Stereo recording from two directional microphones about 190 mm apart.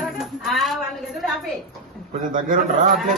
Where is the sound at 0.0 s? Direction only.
Centre (ahead or behind).